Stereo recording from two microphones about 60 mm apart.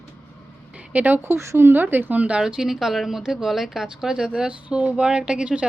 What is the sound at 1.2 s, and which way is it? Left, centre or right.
A woman's voice, right.